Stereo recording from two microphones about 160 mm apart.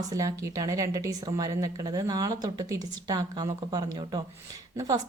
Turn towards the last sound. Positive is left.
turn(degrees=-20)  # may be behind; listen again after turning